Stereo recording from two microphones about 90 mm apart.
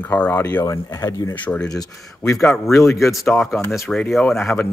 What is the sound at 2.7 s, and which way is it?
Speech, 30° left (ahead or behind).